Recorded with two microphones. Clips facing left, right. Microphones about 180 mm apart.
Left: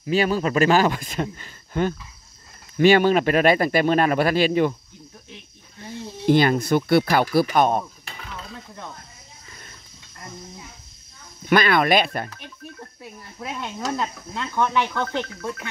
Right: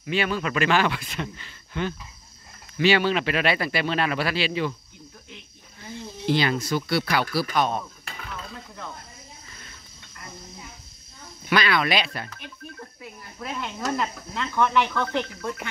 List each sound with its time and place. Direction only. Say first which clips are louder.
0.0 s speech: left 5 dB; 40° left (ahead or behind)
6.2 s speech: left 6 dB; 50° left (ahead or behind)
11.4 s speech: left 5 dB; 50° left (ahead or behind)
13.4 s speech: left 1 dB; 20° left (ahead or behind)